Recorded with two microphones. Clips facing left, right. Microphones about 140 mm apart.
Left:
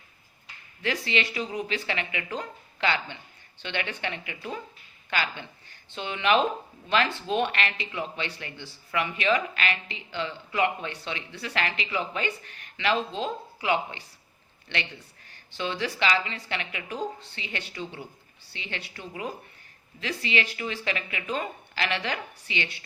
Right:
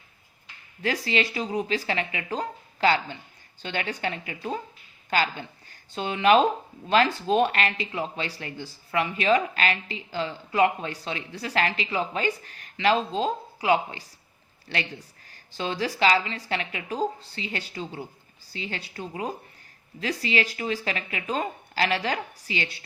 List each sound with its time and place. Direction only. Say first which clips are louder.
0.8 s speech: right 2 dB; 40° right (ahead or behind)